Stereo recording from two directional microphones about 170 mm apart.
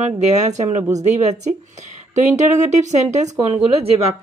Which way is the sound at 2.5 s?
45° right (ahead or behind).